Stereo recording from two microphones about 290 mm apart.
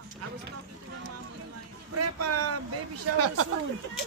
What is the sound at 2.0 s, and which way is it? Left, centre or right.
Vehicle, right.